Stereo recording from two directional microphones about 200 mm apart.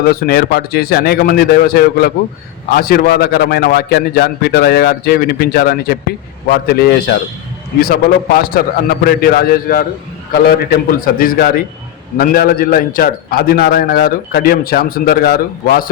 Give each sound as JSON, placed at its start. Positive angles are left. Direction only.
{"t": 0.1, "sound": "a man's voice", "side_deg": 50}